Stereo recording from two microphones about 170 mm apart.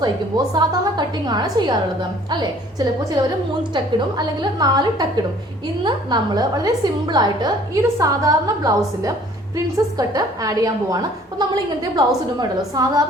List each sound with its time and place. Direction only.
0.0 s a woman's voice: 25° right (ahead or behind)
3.9 s a woman's voice: 25° right (ahead or behind)